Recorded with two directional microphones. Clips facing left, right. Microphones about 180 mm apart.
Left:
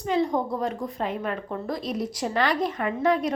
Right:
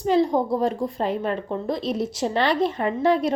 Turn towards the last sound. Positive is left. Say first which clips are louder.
# right 3 dB
turn(degrees=-30)  # may be behind; listen again after turning